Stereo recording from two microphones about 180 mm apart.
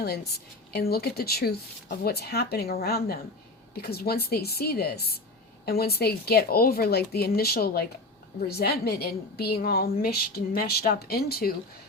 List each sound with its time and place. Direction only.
0.0 s speech: 60° left (ahead or behind)